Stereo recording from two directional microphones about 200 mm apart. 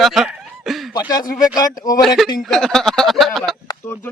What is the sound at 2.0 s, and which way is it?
Speech, centre (ahead or behind).